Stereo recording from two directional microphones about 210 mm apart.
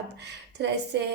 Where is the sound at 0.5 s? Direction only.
55° right (ahead or behind).